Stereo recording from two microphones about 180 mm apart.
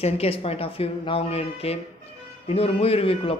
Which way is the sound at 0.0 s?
35° left (ahead or behind).